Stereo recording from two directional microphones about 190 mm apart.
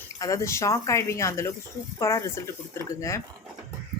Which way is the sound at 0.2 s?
15° left (ahead or behind).